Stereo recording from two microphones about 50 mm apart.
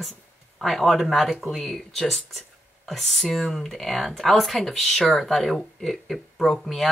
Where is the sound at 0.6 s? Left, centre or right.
Centre.